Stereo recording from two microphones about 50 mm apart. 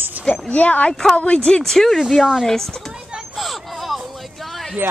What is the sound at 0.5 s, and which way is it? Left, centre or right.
Speech, left.